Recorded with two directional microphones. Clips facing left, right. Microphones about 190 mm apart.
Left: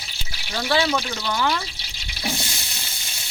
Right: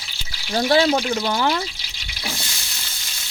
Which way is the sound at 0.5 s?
40° right (ahead or behind).